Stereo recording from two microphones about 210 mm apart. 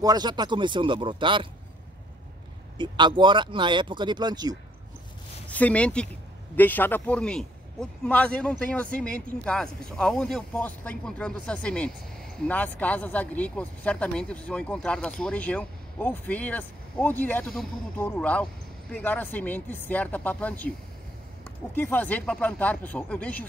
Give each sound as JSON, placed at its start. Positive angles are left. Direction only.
{"t": 0.0, "sound": "speech", "side_deg": -20}
{"t": 2.8, "sound": "speech", "side_deg": -20}
{"t": 5.5, "sound": "a man's voice", "side_deg": 5}
{"t": 21.7, "sound": "speech", "side_deg": 10}